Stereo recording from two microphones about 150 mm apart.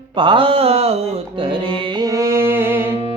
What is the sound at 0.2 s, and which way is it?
Mantra, 35° right (ahead or behind).